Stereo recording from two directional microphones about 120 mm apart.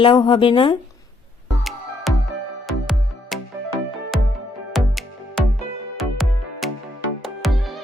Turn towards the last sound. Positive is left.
turn(degrees=0)  # may be behind; listen again after turning